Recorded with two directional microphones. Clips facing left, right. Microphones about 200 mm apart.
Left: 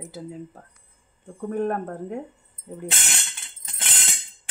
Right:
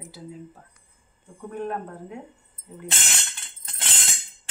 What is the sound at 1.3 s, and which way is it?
Speech, 50° left (ahead or behind).